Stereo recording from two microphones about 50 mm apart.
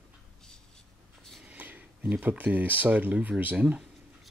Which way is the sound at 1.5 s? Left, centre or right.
Right.